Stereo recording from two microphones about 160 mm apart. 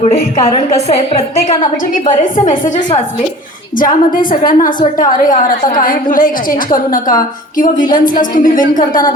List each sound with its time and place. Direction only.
0.0 s a woman's voice: 40° left (ahead or behind)
3.8 s a woman's voice: 60° left (ahead or behind)